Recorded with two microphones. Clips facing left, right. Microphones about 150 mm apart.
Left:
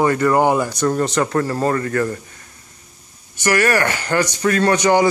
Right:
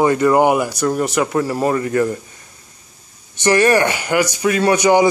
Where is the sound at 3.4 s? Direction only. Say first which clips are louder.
Right 4 dB; 20° right (ahead or behind).